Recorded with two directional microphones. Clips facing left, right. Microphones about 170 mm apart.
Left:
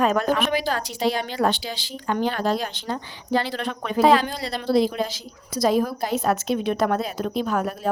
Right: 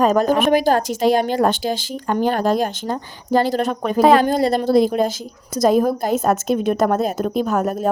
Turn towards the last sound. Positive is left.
turn(degrees=-45)  # may be behind; listen again after turning